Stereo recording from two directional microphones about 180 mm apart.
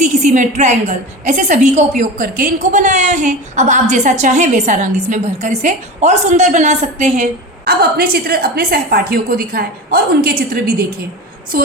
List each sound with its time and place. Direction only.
0.0 s a woman's voice: 40° right (ahead or behind)
7.6 s a woman's voice: 60° right (ahead or behind)